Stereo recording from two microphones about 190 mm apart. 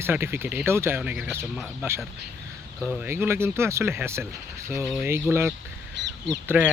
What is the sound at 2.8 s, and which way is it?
Speech, 5° right (ahead or behind).